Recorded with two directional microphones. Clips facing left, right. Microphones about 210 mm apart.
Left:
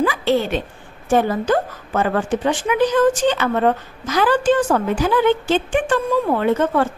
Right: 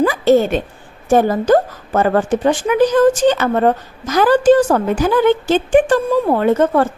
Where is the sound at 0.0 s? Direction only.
45° right (ahead or behind).